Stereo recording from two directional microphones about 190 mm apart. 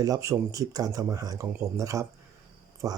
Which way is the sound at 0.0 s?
15° right (ahead or behind).